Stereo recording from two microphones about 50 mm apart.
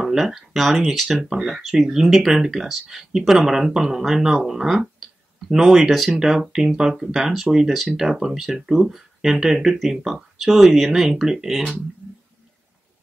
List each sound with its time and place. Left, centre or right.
0.0 s speech: centre
1.3 s speech: centre
1.6 s speech: centre